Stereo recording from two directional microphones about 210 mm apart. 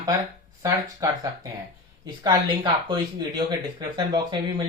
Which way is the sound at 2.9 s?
20° right (ahead or behind).